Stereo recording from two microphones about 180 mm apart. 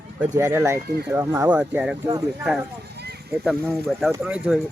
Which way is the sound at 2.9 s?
65° right (ahead or behind).